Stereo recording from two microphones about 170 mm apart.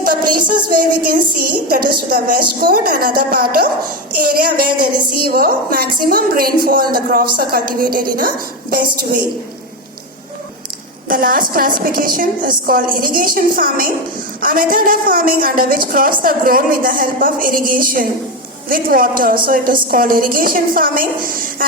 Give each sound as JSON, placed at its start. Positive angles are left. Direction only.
{"t": 0.0, "sound": "a sound", "side_deg": -60}
{"t": 0.7, "sound": "a woman's voice", "side_deg": -55}
{"t": 11.1, "sound": "a woman's voice", "side_deg": -55}